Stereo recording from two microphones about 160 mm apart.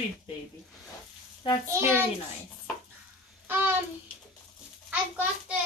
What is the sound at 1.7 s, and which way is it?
Speech, 15° right (ahead or behind).